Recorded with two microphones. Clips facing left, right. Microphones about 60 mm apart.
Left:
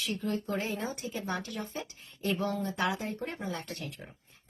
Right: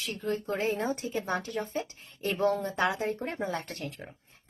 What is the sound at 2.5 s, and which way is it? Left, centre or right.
Speech, right.